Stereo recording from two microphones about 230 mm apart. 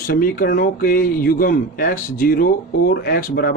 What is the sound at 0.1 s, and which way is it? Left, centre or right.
Speech, left.